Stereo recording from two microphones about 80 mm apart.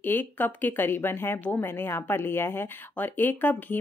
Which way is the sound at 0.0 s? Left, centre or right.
Left.